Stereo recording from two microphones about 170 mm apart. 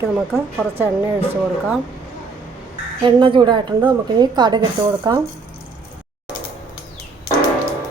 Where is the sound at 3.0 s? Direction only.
30° right (ahead or behind).